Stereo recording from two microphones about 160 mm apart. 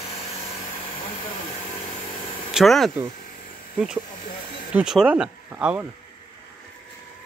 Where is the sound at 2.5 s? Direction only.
Centre (ahead or behind).